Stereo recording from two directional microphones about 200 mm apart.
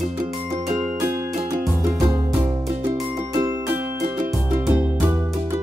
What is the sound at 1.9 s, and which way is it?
Music, 15° right (ahead or behind).